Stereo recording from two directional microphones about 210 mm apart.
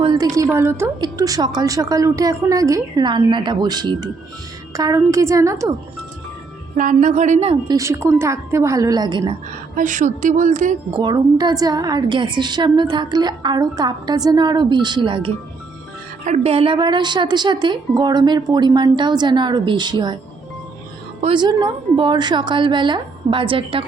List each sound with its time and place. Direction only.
0.0 s a woman's voice: 20° right (ahead or behind)
6.7 s a woman's voice: 35° right (ahead or behind); by 9.3 s 20° right (ahead or behind)
9.7 s a woman's voice: 35° right (ahead or behind)
10.9 s a woman's voice: 20° right (ahead or behind)
21.2 s a woman's voice: 25° right (ahead or behind)